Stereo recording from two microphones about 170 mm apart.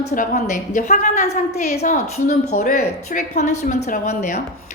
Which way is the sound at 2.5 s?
65° left (ahead or behind).